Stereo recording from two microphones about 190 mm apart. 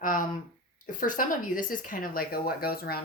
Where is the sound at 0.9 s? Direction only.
45° left (ahead or behind).